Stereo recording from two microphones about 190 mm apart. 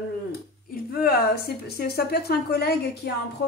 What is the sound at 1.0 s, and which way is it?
A woman's voice, 50° left (ahead or behind).